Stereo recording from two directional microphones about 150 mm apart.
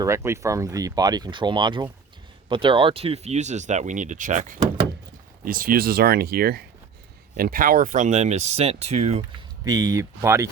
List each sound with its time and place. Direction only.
0.0 s speech: 20° right (ahead or behind); by 4.5 s 55° right (ahead or behind)
5.5 s speech: 70° right (ahead or behind); by 6.6 s 90° right
7.3 s speech: 70° right (ahead or behind); by 9.2 s 45° right (ahead or behind)
9.6 s speech: 25° right (ahead or behind)